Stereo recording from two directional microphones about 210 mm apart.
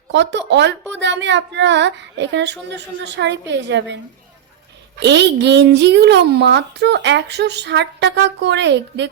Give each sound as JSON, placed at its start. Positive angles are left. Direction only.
{"t": 0.1, "sound": "a woman's voice", "side_deg": -55}